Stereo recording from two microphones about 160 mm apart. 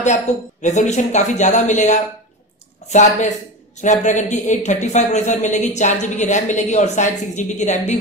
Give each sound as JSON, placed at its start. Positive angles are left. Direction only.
{"t": 0.0, "sound": "a woman's voice", "side_deg": 45}